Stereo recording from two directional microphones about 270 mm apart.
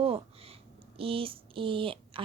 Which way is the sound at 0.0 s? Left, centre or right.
Right.